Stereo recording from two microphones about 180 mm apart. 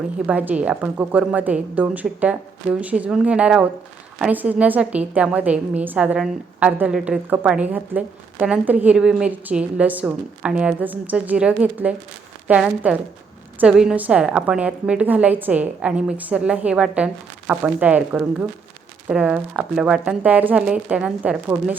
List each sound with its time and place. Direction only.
0.3 s a woman's voice: 10° right (ahead or behind)